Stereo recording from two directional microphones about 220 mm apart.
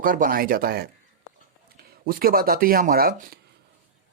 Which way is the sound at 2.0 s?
40° right (ahead or behind).